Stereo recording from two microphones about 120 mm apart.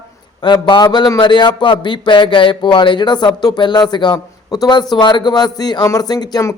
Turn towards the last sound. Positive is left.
turn(degrees=35)  # may be behind; listen again after turning